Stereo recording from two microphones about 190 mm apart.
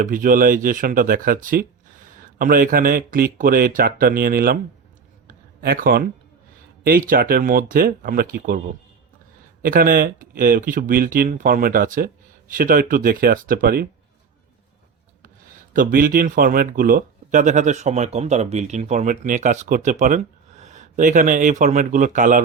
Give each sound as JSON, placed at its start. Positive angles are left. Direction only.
{"t": 0.0, "sound": "speech", "side_deg": -45}
{"t": 5.3, "sound": "a sound", "side_deg": -45}
{"t": 6.8, "sound": "speech", "side_deg": -50}
{"t": 9.6, "sound": "speech", "side_deg": -45}
{"t": 15.7, "sound": "speech", "side_deg": -45}